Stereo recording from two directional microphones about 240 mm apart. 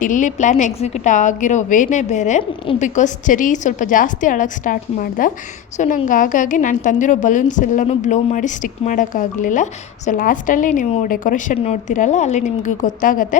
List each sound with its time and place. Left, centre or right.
0.0 s a woman's voice: left